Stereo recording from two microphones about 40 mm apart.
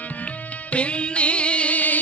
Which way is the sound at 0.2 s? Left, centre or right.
Left.